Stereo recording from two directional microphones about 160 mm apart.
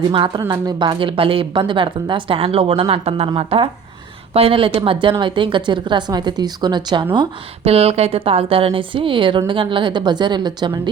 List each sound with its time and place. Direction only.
0.1 s a woman's voice: 25° right (ahead or behind)